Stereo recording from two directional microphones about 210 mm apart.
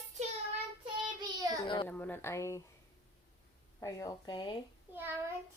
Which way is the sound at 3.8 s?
15° left (ahead or behind).